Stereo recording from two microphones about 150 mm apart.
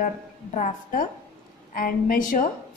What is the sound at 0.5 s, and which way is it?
A woman's voice, 60° left (ahead or behind).